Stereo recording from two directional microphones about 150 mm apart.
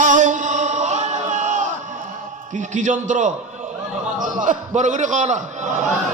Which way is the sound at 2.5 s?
55° right (ahead or behind).